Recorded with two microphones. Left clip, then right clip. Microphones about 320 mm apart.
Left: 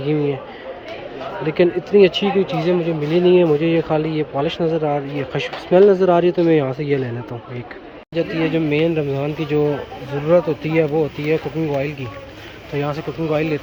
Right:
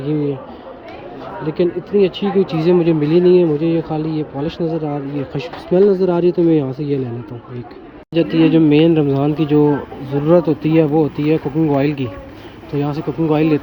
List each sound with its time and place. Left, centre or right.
1.5 s speech: centre
2.2 s speech: left
2.6 s speech: centre
8.1 s speech: centre